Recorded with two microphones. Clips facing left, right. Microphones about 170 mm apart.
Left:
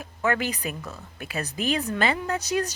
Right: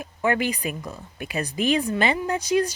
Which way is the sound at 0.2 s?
15° right (ahead or behind).